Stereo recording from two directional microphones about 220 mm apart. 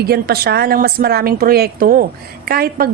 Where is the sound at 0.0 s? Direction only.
45° right (ahead or behind).